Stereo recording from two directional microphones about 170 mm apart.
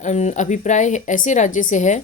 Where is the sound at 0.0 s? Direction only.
45° left (ahead or behind).